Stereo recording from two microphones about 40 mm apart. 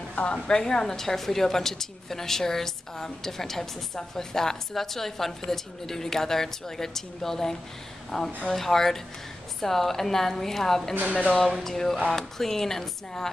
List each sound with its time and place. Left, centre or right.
0.1 s a sound: left
0.5 s a woman's voice: centre
11.1 s speech: left
11.6 s a woman's voice: centre